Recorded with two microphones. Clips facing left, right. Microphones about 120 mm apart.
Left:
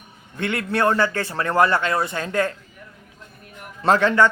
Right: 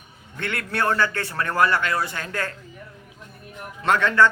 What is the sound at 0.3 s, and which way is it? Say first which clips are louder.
Speech: left 4 dB; 20° left (ahead or behind).